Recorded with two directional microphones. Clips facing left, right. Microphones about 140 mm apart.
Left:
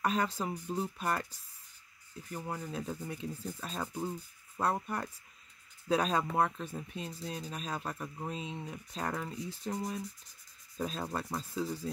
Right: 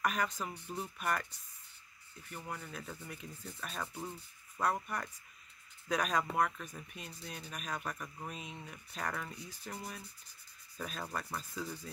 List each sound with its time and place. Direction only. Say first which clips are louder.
0.0 s speech: left 3 dB; 30° left (ahead or behind)